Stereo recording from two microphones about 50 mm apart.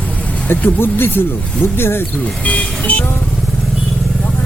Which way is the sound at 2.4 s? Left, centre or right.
Left.